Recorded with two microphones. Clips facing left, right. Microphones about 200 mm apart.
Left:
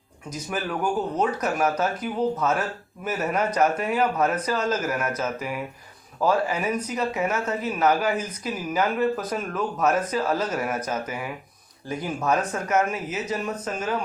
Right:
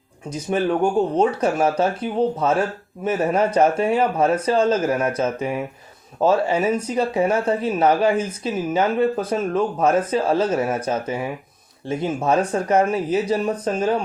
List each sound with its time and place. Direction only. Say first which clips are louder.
0.3 s speech: right 9 dB; 30° right (ahead or behind)